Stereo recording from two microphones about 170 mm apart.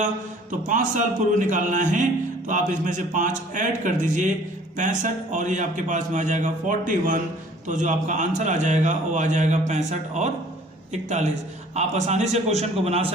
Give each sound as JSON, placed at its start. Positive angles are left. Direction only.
{"t": 0.7, "sound": "a man's voice", "side_deg": -45}